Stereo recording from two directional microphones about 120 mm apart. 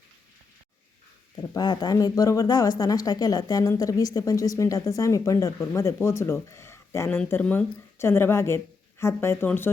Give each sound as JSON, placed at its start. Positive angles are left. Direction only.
{"t": 1.4, "sound": "speech", "side_deg": 35}